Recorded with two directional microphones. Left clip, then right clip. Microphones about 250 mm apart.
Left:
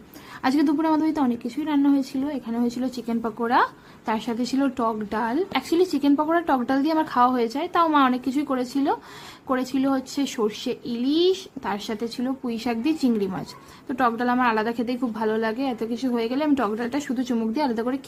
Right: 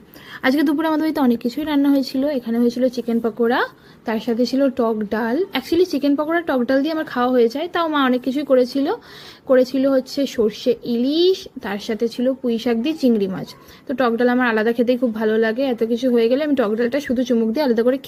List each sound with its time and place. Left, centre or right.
0.4 s a woman's voice: centre